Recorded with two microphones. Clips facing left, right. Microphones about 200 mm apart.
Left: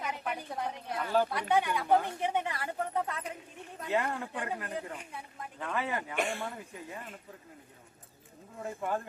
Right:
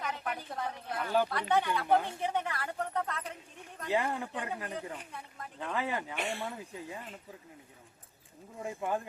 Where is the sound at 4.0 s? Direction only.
20° right (ahead or behind).